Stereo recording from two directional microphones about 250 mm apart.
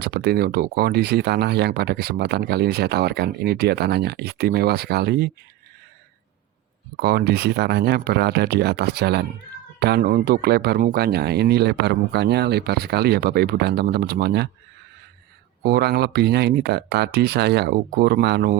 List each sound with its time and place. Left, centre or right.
0.0 s speech: right
6.9 s speech: right
15.6 s speech: right